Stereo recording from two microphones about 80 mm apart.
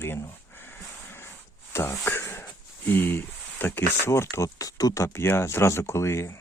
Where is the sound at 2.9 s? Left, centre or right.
Left.